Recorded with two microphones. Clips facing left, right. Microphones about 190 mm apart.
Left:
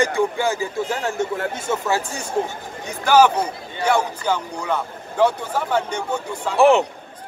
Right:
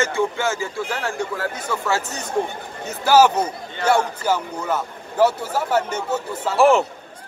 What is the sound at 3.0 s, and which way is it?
Speech, 5° right (ahead or behind).